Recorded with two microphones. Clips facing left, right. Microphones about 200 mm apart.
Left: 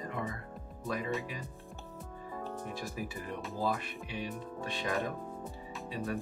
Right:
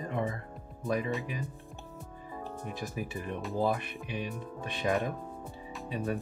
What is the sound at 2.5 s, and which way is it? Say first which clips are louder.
Speech: right 5 dB; 20° right (ahead or behind).